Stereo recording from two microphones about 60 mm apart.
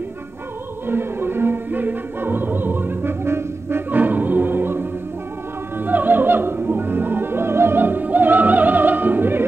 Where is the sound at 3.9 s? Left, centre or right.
Right.